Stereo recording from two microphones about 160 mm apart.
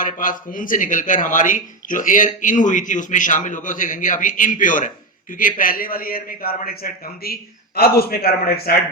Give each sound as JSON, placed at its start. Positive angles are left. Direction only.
{"t": 0.0, "sound": "a man's voice", "side_deg": 55}